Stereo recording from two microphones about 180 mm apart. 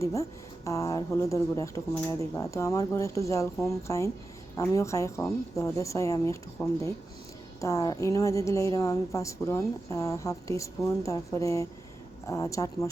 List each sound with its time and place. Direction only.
0.0 s a woman's voice: 15° left (ahead or behind)